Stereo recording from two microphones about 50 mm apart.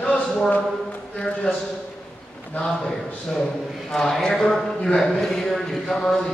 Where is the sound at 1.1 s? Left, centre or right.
Centre.